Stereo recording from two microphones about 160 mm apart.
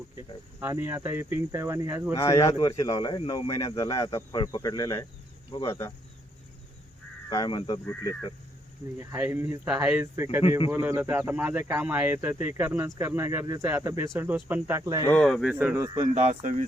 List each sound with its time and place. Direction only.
0.2 s speech: 15° right (ahead or behind)
2.1 s speech: 20° left (ahead or behind)
7.3 s speech: 25° left (ahead or behind)
9.0 s speech: 15° right (ahead or behind)
15.1 s speech: 5° left (ahead or behind)
15.5 s speech: 15° right (ahead or behind)
16.3 s speech: 55° right (ahead or behind)